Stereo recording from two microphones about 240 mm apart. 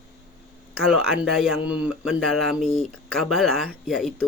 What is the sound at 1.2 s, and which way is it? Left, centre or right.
Speech, centre.